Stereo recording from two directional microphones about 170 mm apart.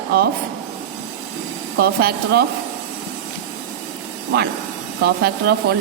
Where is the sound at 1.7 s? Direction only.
70° right (ahead or behind).